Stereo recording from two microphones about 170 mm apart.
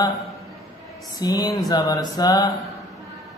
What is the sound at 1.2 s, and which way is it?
Speech, 20° left (ahead or behind).